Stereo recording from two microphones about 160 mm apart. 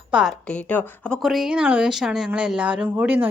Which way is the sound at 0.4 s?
10° left (ahead or behind).